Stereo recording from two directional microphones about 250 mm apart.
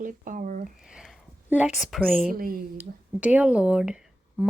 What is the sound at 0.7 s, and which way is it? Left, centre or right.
Speech, centre.